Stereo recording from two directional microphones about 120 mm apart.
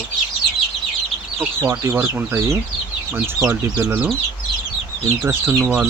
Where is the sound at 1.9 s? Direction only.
20° right (ahead or behind).